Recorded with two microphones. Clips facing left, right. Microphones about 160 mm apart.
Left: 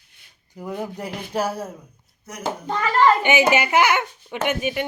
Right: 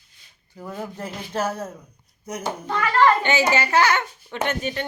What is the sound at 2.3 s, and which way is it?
Speech, 15° right (ahead or behind).